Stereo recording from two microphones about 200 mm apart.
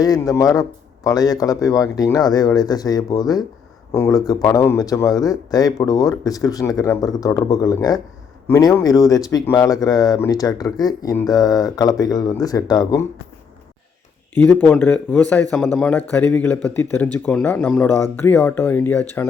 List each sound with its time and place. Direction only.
0.0 s speech: 15° left (ahead or behind)
14.3 s speech: 10° left (ahead or behind)